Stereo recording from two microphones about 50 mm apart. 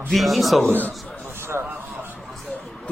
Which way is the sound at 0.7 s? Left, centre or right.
Right.